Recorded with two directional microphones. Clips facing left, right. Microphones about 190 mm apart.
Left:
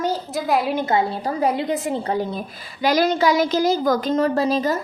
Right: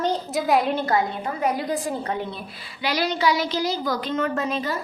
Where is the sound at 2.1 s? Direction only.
40° left (ahead or behind).